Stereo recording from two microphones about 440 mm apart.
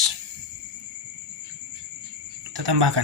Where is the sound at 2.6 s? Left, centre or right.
Right.